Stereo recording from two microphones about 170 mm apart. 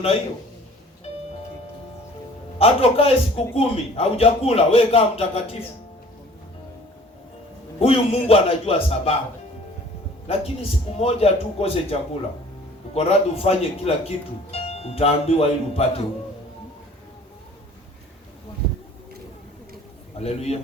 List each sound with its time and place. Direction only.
2.6 s speech: 35° left (ahead or behind)
7.8 s speech: 35° left (ahead or behind)
10.2 s speech: 35° left (ahead or behind)
20.1 s a man's voice: 40° left (ahead or behind)